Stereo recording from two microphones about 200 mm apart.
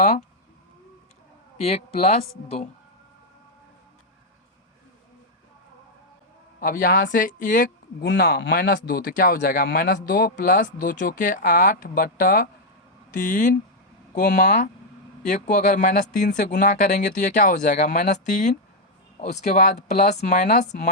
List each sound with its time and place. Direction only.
1.5 s speech: 30° left (ahead or behind)
6.6 s speech: 45° left (ahead or behind)